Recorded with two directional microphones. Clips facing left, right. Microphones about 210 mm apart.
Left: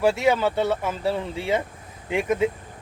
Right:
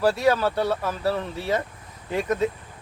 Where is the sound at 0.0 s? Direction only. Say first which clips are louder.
Left 1 dB; 25° left (ahead or behind).